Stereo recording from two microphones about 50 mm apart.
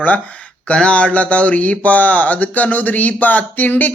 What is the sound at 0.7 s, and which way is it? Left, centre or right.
Speech, left.